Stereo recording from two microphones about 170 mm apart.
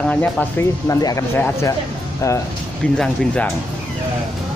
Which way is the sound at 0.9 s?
20° left (ahead or behind).